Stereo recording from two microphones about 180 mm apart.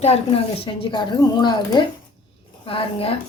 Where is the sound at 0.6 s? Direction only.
30° left (ahead or behind).